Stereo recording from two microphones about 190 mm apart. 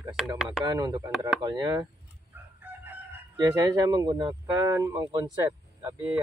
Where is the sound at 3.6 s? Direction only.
20° right (ahead or behind).